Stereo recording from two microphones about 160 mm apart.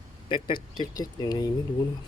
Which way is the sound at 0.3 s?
30° left (ahead or behind).